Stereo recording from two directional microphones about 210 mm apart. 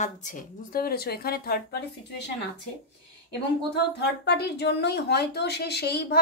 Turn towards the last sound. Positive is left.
turn(degrees=50)  # may be behind; listen again after turning